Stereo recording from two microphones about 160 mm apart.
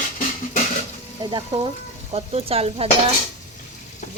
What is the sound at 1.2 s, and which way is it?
Speech, 30° right (ahead or behind).